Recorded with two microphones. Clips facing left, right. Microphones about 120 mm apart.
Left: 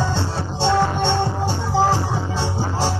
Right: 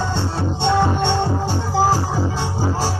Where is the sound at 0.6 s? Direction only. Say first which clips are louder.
Even; 15° right (ahead or behind).